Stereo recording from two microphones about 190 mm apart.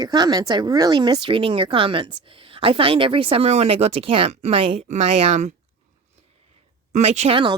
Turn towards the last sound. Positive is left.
turn(degrees=-30)  # may be behind; listen again after turning